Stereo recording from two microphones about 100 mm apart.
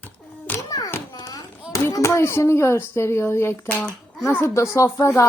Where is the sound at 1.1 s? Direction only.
45° left (ahead or behind).